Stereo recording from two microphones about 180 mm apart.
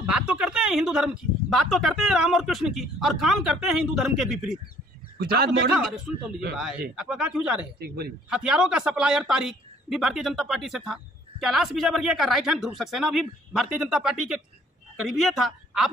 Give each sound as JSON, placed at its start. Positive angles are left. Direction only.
{"t": 0.0, "sound": "speech", "side_deg": -5}
{"t": 5.1, "sound": "a man's voice", "side_deg": -60}
{"t": 5.7, "sound": "speech", "side_deg": 0}
{"t": 7.8, "sound": "a man's voice", "side_deg": -60}
{"t": 8.3, "sound": "speech", "side_deg": -5}